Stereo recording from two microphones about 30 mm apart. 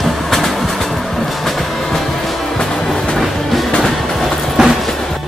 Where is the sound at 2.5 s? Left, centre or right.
Centre.